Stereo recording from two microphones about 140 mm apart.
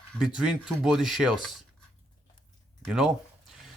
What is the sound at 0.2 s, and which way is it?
Speech, 5° right (ahead or behind).